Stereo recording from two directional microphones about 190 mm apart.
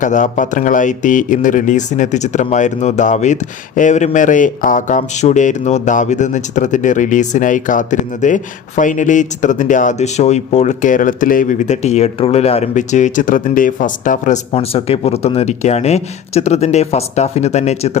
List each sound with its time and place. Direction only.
0.0 s speech: 40° left (ahead or behind)
14.5 s speech: 30° left (ahead or behind)